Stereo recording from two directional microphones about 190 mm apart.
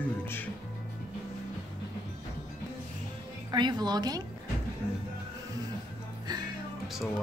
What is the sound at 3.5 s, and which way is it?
Speech, 20° right (ahead or behind).